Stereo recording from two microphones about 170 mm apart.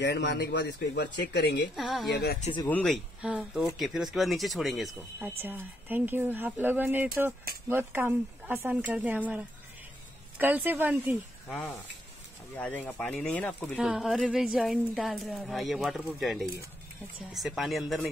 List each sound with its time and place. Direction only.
0.0 s speech: 85° left
1.8 s speech: centre (ahead or behind)
5.4 s speech: 10° right (ahead or behind)
10.4 s speech: 10° right (ahead or behind)
11.4 s speech: centre (ahead or behind)
13.7 s speech: 5° right (ahead or behind)